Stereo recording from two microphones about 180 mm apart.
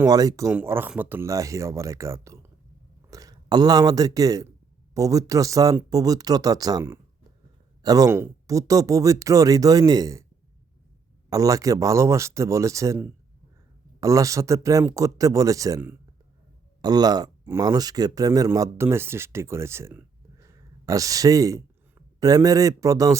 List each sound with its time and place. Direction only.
0.0 s speech: 20° right (ahead or behind)
11.3 s speech: 20° right (ahead or behind)